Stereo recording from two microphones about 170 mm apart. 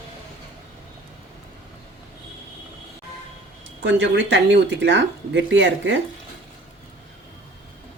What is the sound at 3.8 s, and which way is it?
Speech, 90° right.